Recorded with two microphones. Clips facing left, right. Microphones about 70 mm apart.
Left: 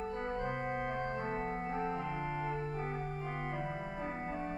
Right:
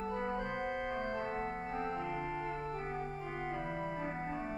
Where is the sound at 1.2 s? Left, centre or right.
Centre.